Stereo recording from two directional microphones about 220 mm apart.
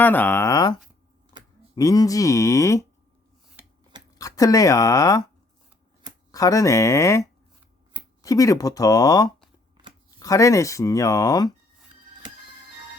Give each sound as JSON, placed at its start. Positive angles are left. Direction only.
{"t": 0.0, "sound": "speech", "side_deg": 10}
{"t": 4.2, "sound": "speech", "side_deg": 15}
{"t": 6.3, "sound": "speech", "side_deg": 15}